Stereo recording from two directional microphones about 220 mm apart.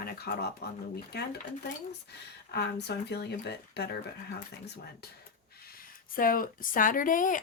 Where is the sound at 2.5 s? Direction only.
50° left (ahead or behind).